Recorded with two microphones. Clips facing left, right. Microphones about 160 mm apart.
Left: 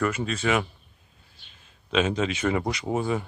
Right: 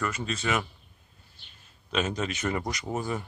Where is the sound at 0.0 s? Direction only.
5° left (ahead or behind).